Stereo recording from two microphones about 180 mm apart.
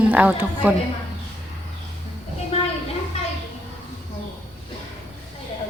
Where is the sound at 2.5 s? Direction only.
35° left (ahead or behind).